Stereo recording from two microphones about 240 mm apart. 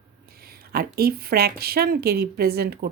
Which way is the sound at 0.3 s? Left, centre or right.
Right.